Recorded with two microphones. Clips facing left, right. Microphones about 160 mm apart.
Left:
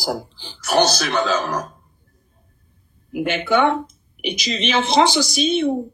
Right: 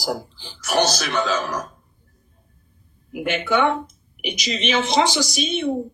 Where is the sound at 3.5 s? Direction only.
35° left (ahead or behind).